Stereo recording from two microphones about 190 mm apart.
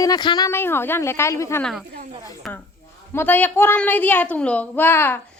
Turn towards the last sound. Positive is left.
turn(degrees=10)  # may be behind; listen again after turning